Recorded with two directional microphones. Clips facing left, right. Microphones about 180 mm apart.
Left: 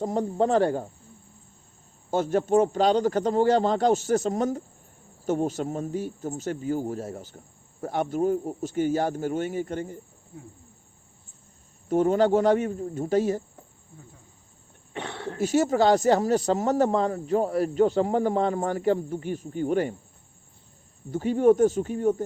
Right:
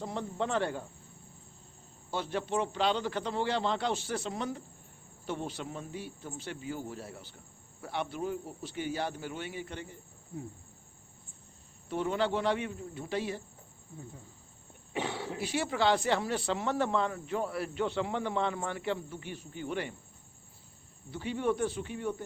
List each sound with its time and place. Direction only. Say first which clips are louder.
0.0 s speech: left 10 dB; 40° left (ahead or behind)
2.0 s speech: left 11 dB; 45° left (ahead or behind)
11.9 s speech: left 10 dB; 45° left (ahead or behind)
14.9 s speech: left 1 dB; 5° right (ahead or behind)
15.4 s speech: left 11 dB; 45° left (ahead or behind)
21.1 s speech: left 12 dB; 45° left (ahead or behind)